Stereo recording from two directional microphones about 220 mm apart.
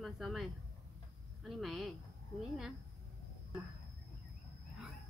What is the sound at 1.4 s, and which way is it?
Speech, centre (ahead or behind).